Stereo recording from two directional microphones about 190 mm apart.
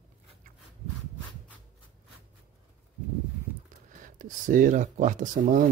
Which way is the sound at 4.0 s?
45° right (ahead or behind).